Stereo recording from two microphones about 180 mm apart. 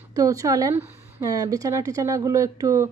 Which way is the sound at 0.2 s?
20° right (ahead or behind).